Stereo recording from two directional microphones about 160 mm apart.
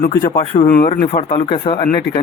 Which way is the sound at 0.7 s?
65° left (ahead or behind).